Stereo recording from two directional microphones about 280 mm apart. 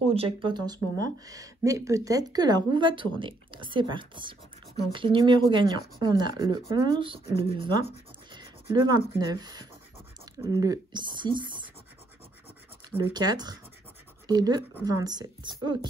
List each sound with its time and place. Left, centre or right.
0.1 s speech: centre
12.9 s speech: centre